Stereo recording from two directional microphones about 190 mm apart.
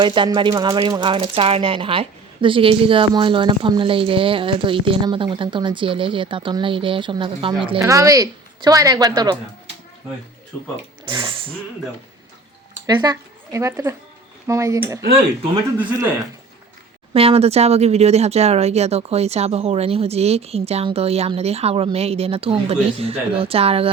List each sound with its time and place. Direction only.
0.0 s speech: 25° right (ahead or behind)
11.0 s speech: 25° right (ahead or behind)
12.8 s speech: 20° right (ahead or behind)
17.2 s speech: 30° right (ahead or behind)